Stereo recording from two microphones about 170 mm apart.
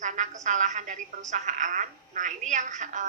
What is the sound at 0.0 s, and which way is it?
A woman's voice, 45° right (ahead or behind).